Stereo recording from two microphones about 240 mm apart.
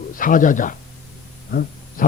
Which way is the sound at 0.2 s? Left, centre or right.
Left.